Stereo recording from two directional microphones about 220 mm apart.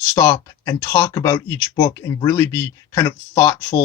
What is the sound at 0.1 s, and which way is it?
Speech, 15° left (ahead or behind).